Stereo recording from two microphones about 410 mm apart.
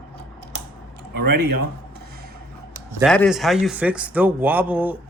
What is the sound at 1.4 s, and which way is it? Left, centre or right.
Speech, right.